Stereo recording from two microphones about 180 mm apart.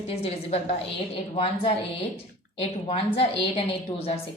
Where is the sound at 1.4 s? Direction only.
30° left (ahead or behind).